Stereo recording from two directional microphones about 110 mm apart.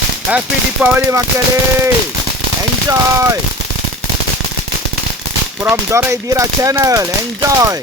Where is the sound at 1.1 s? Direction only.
25° right (ahead or behind).